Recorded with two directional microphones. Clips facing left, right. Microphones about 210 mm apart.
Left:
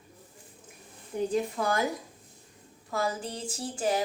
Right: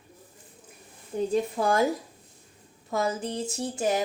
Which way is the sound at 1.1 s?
30° right (ahead or behind).